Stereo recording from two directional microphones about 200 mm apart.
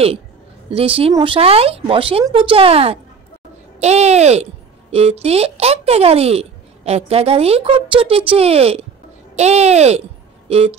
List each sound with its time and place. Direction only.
0.7 s speech: 30° right (ahead or behind)